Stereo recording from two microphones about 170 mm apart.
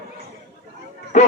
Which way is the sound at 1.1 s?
45° left (ahead or behind).